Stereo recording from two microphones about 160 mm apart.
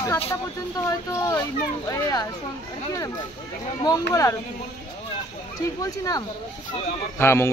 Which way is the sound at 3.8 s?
20° left (ahead or behind).